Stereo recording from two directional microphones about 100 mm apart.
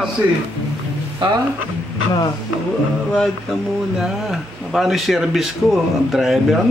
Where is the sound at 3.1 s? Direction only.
Centre (ahead or behind).